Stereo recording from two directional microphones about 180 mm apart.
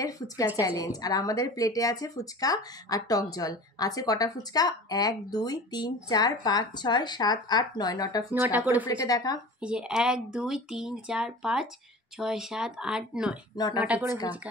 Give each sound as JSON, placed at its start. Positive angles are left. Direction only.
{"t": 0.6, "sound": "speech", "side_deg": 20}
{"t": 8.3, "sound": "speech", "side_deg": -10}
{"t": 8.8, "sound": "speech", "side_deg": 20}
{"t": 9.6, "sound": "speech", "side_deg": -5}